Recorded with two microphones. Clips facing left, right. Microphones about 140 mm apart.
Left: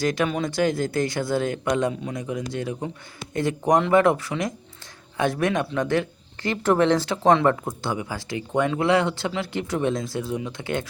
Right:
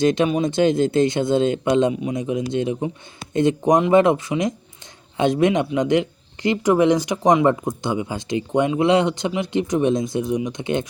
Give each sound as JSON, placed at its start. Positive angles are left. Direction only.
{"t": 0.0, "sound": "speech", "side_deg": -20}